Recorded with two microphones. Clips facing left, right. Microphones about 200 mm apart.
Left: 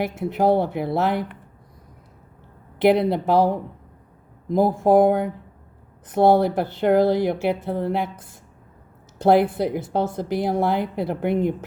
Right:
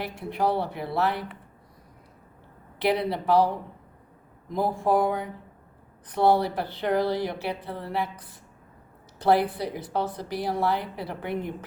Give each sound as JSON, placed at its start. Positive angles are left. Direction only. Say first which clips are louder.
{"t": 0.0, "sound": "a woman's voice", "louder": "left 6 dB", "side_deg": 50}
{"t": 2.7, "sound": "a woman's voice", "louder": "left 8 dB", "side_deg": 50}
{"t": 4.5, "sound": "a woman's voice", "louder": "left 7 dB", "side_deg": 50}